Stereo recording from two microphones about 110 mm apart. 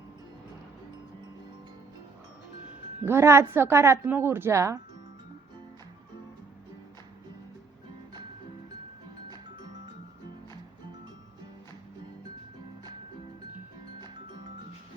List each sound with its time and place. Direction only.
3.0 s a woman's voice: 20° right (ahead or behind)